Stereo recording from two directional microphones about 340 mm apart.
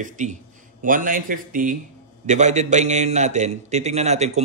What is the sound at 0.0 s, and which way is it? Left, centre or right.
A man's voice, right.